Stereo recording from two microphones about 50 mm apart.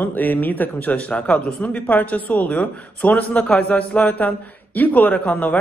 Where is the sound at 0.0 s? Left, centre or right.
Left.